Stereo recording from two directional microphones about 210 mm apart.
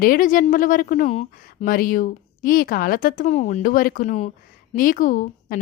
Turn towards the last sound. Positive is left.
turn(degrees=40)  # may be behind; listen again after turning